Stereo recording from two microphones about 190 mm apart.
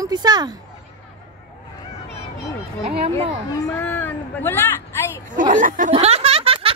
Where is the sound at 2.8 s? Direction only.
30° right (ahead or behind).